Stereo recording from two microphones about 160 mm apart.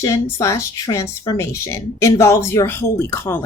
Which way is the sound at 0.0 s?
20° left (ahead or behind).